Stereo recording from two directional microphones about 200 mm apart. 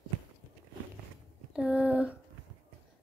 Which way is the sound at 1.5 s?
5° right (ahead or behind).